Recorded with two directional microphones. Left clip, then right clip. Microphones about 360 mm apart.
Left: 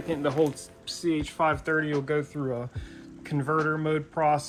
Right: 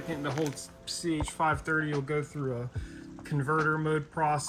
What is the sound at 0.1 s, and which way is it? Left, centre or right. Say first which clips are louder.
Speech: left 7 dB; centre.